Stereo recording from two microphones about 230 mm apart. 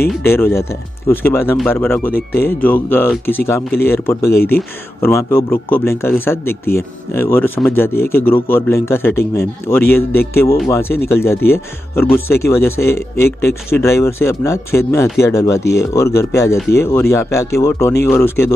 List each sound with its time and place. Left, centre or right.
0.2 s speech: centre
2.1 s speech: left
2.6 s speech: centre